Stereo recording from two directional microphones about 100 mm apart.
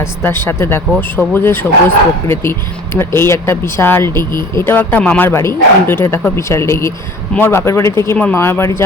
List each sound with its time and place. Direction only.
0.0 s speech: 25° left (ahead or behind)